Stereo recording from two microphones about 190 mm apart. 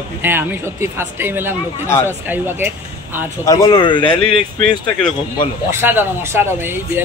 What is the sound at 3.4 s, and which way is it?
Speech, 15° left (ahead or behind).